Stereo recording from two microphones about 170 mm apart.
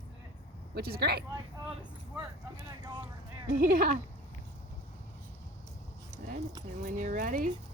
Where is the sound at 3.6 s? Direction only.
55° right (ahead or behind).